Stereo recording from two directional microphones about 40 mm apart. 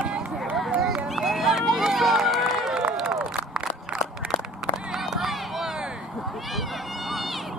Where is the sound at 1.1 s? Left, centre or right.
Centre.